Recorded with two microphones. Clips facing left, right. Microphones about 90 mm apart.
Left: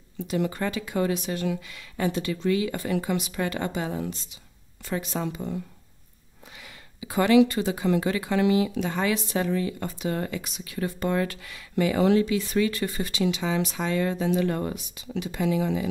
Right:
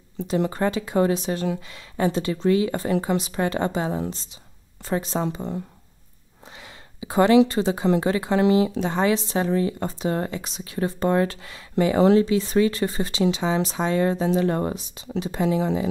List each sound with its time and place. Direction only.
0.2 s speech: 30° right (ahead or behind)